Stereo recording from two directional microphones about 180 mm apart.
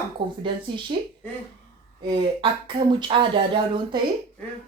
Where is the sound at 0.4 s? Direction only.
25° right (ahead or behind).